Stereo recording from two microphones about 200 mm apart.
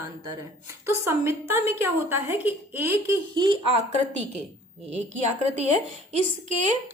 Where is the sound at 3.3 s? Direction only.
25° right (ahead or behind).